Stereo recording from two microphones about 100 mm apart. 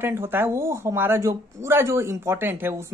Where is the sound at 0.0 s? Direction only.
25° right (ahead or behind).